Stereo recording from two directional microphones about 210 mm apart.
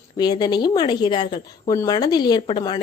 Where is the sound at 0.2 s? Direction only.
20° left (ahead or behind).